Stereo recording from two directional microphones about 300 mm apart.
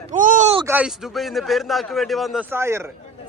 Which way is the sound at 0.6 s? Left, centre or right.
Centre.